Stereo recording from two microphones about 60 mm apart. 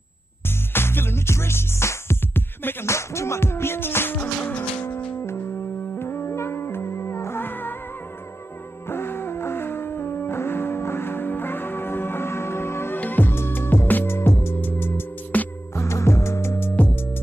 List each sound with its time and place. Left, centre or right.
0.5 s music: left
2.9 s music: left
5.2 s music: left
8.8 s music: left
15.3 s music: left
15.7 s music: left